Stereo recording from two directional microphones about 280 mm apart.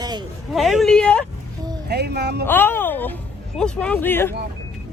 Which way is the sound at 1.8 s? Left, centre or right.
Right.